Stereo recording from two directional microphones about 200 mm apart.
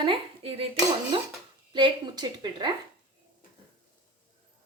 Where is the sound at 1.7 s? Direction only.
25° right (ahead or behind).